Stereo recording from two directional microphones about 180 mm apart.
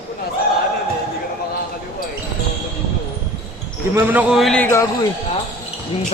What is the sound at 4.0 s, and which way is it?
Speech, 10° right (ahead or behind).